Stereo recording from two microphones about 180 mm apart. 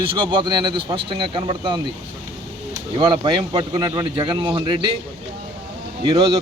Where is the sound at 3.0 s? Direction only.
25° right (ahead or behind).